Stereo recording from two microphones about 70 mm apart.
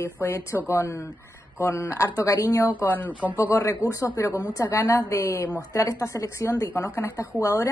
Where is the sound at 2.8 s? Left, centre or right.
Left.